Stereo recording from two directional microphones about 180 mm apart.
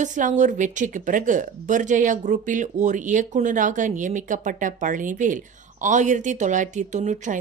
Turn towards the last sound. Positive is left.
turn(degrees=-40)  # may be behind; listen again after turning